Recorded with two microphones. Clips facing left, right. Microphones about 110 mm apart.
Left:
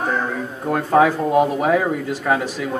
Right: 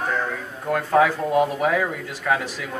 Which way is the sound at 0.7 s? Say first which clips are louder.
Left 3 dB; 30° left (ahead or behind).